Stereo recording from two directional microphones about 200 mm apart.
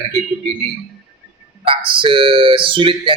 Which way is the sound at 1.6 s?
25° right (ahead or behind).